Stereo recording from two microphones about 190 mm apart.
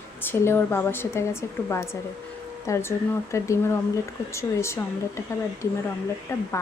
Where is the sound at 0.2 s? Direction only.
10° left (ahead or behind).